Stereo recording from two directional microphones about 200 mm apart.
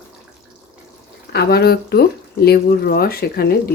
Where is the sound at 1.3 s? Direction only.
50° left (ahead or behind).